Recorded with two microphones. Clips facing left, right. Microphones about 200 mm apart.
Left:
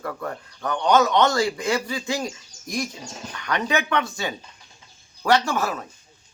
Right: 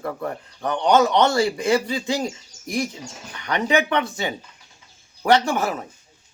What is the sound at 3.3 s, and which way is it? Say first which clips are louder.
A man's voice: right 4 dB; 15° right (ahead or behind).